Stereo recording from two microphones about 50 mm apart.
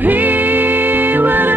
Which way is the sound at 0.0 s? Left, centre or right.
Right.